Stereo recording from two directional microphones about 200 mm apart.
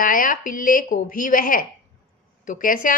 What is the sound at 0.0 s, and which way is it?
Speech, 45° left (ahead or behind).